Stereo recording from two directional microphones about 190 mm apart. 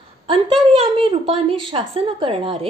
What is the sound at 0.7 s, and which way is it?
A woman's voice, 30° right (ahead or behind).